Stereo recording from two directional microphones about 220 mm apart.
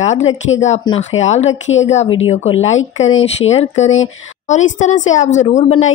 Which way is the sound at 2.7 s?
65° left (ahead or behind).